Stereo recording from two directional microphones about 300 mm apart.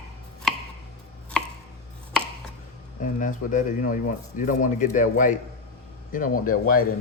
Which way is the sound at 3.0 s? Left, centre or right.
Left.